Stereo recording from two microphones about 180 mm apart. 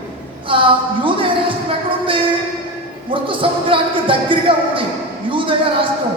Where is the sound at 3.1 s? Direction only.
30° right (ahead or behind).